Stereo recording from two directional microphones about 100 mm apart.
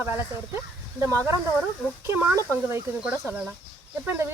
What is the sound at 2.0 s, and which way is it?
Speech, 25° right (ahead or behind).